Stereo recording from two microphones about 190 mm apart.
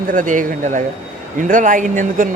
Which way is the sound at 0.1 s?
45° right (ahead or behind).